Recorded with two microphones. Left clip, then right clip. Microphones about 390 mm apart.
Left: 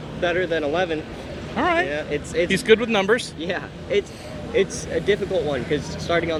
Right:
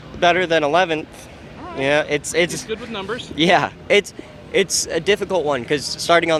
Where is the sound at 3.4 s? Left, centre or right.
Right.